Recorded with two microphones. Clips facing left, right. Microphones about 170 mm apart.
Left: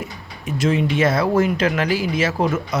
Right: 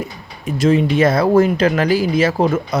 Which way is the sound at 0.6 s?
35° right (ahead or behind).